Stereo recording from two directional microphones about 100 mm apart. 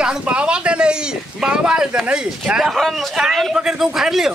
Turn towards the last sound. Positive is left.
turn(degrees=-5)  # may be behind; listen again after turning